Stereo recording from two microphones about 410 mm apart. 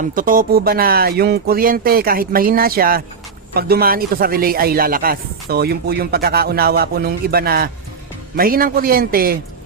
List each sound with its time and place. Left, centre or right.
0.0 s speech: centre